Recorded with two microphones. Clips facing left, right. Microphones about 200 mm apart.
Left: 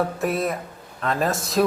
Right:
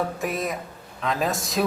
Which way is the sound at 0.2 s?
Centre (ahead or behind).